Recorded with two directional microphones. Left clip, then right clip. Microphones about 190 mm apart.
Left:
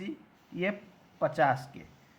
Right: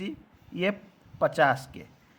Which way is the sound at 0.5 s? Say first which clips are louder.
Right 4 dB; 35° right (ahead or behind).